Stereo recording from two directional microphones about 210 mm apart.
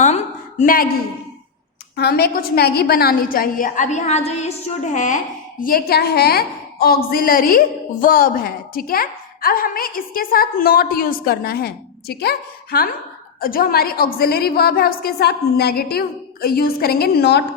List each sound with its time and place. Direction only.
0.6 s a woman's voice: 45° left (ahead or behind)
2.0 s a woman's voice: 50° left (ahead or behind)